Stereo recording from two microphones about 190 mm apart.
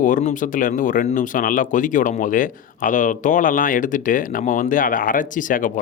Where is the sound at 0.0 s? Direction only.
40° left (ahead or behind).